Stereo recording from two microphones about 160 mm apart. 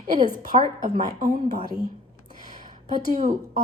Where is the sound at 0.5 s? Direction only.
45° right (ahead or behind).